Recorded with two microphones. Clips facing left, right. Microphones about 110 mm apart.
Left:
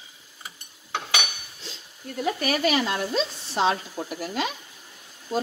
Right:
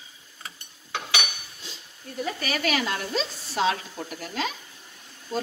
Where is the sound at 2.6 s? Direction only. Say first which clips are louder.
Left 2 dB; 5° left (ahead or behind).